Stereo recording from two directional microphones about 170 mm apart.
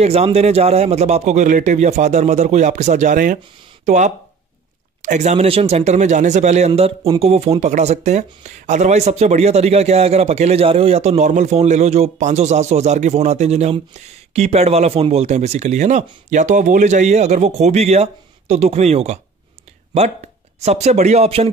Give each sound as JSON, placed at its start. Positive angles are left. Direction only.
{"t": 0.0, "sound": "speech", "side_deg": -35}
{"t": 20.6, "sound": "speech", "side_deg": -40}